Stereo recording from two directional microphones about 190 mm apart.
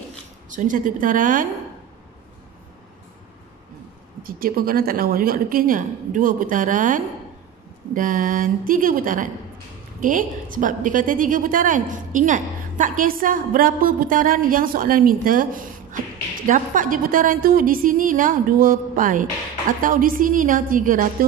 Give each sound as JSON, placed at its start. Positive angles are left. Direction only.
{"t": 0.5, "sound": "a woman's voice", "side_deg": -45}
{"t": 4.2, "sound": "a woman's voice", "side_deg": -50}